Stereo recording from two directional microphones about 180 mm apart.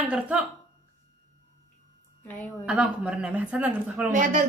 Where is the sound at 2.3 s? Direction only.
10° left (ahead or behind).